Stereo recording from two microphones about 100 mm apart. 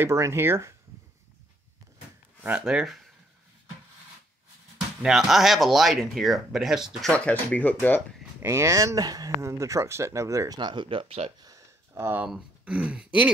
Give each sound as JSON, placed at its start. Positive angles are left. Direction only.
{"t": 0.0, "sound": "speech", "side_deg": -25}
{"t": 2.6, "sound": "speech", "side_deg": -5}
{"t": 5.0, "sound": "speech", "side_deg": -5}
{"t": 7.1, "sound": "speech", "side_deg": 15}
{"t": 8.4, "sound": "speech", "side_deg": -30}
{"t": 10.6, "sound": "speech", "side_deg": -55}
{"t": 11.4, "sound": "a sound", "side_deg": -35}
{"t": 12.3, "sound": "speech", "side_deg": -10}